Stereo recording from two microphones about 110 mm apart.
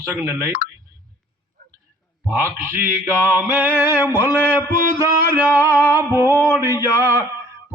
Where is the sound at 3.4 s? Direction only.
15° right (ahead or behind).